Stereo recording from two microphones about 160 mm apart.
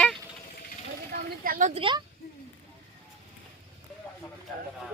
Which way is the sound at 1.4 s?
60° right (ahead or behind).